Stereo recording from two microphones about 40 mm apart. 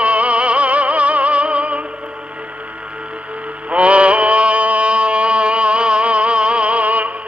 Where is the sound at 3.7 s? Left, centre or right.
Right.